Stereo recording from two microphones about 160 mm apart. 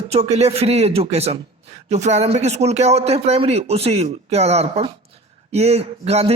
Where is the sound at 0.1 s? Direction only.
40° right (ahead or behind).